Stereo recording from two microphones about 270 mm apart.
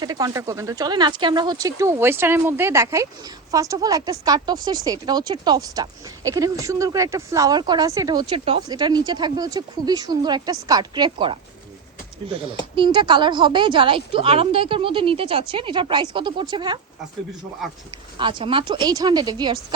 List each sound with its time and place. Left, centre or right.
0.0 s speech: centre
12.7 s a woman's voice: centre
18.2 s speech: centre